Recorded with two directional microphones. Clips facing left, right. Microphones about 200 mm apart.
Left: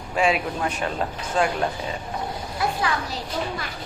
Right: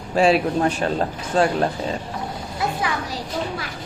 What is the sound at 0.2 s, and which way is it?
Speech, 35° right (ahead or behind).